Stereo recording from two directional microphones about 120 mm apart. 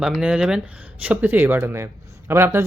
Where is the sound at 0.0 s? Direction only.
5° right (ahead or behind).